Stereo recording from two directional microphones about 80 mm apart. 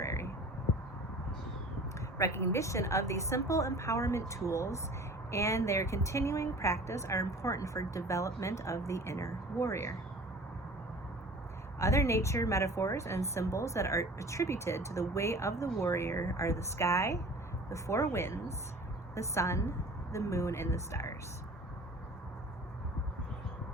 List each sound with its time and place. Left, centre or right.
0.0 s a sound: left
2.1 s a woman's voice: left
11.8 s a woman's voice: left